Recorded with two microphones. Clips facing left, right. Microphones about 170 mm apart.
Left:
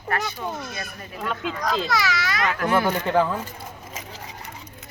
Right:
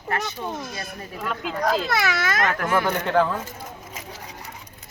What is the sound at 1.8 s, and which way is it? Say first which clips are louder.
Speech: right 1 dB; 55° right (ahead or behind).